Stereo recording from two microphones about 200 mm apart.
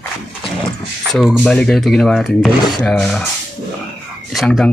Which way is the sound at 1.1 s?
Centre (ahead or behind).